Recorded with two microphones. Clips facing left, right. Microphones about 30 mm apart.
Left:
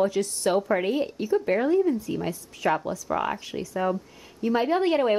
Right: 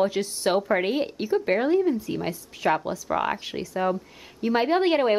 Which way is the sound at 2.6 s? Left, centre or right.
Centre.